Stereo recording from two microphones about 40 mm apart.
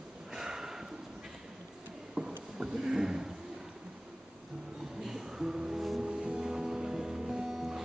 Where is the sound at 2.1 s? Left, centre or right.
Centre.